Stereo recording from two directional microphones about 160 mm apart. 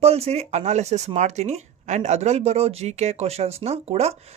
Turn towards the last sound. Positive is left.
turn(degrees=-40)  # may be behind; listen again after turning